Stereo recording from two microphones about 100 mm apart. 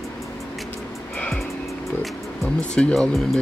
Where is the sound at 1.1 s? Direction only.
10° left (ahead or behind).